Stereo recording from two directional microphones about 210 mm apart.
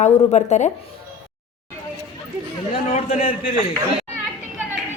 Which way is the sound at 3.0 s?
30° left (ahead or behind).